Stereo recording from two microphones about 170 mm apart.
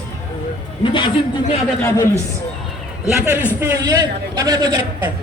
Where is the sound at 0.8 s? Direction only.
30° left (ahead or behind).